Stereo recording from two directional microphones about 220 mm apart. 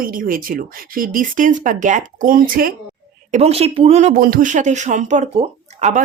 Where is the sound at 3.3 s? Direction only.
30° right (ahead or behind).